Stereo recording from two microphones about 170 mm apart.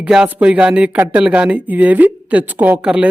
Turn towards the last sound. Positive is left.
turn(degrees=-5)  # may be behind; listen again after turning